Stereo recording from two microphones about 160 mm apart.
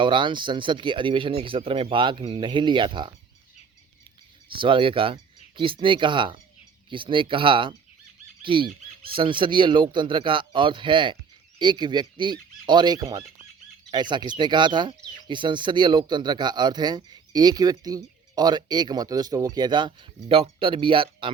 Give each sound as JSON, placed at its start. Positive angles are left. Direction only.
{"t": 0.0, "sound": "speech", "side_deg": -30}
{"t": 4.4, "sound": "speech", "side_deg": -30}
{"t": 8.4, "sound": "squawk", "side_deg": -30}
{"t": 9.1, "sound": "speech", "side_deg": -30}